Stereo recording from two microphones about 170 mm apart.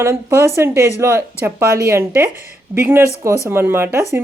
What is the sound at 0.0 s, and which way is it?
Speech, 15° right (ahead or behind).